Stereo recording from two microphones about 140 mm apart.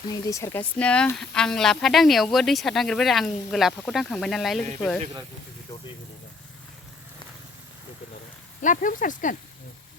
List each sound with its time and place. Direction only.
0.1 s speech: 25° left (ahead or behind)
0.8 s speech: 10° left (ahead or behind)
8.6 s speech: 70° left (ahead or behind)